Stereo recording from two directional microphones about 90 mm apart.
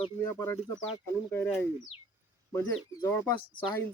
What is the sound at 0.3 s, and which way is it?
Speech, 30° left (ahead or behind).